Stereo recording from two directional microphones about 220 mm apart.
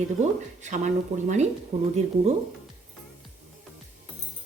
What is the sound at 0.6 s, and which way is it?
Speech, 35° right (ahead or behind).